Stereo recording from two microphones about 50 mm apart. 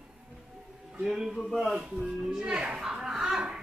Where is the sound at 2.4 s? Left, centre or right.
Centre.